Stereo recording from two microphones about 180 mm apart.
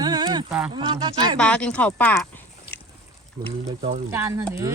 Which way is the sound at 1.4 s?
5° left (ahead or behind).